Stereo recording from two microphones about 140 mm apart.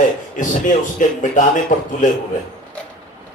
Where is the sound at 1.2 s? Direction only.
65° left (ahead or behind).